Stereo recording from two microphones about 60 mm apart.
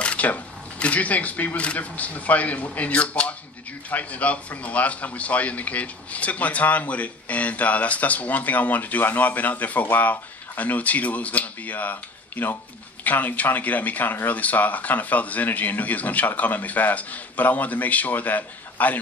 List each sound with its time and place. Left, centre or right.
0.0 s speech: left